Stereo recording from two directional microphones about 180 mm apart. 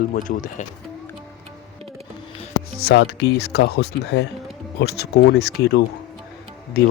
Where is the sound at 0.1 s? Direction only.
45° left (ahead or behind).